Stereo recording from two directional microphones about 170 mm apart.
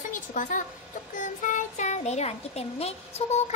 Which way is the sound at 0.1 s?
50° left (ahead or behind).